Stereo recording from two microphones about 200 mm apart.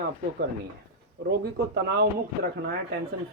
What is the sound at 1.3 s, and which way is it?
Speech, 55° right (ahead or behind).